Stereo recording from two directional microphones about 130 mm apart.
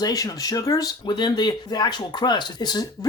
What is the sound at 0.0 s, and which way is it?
Speech, 25° left (ahead or behind).